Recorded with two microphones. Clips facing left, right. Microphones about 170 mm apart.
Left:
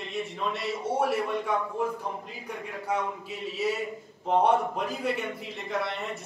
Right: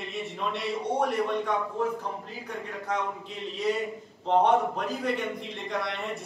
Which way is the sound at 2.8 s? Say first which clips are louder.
Left 2 dB; 10° left (ahead or behind).